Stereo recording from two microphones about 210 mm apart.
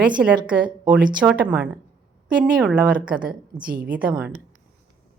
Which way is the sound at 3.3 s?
45° right (ahead or behind).